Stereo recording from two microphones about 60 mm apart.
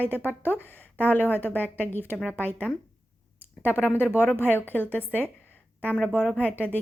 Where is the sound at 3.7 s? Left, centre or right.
Left.